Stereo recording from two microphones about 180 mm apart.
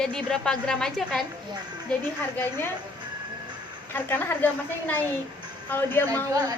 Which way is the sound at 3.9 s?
10° left (ahead or behind).